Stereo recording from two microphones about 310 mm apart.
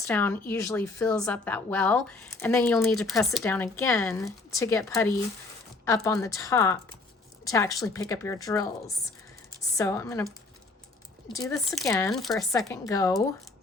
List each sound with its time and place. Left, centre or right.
0.1 s a woman's voice: centre
9.7 s a woman's voice: centre
11.3 s a woman's voice: centre